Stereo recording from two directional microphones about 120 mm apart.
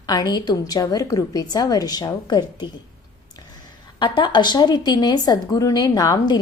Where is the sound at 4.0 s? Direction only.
40° left (ahead or behind).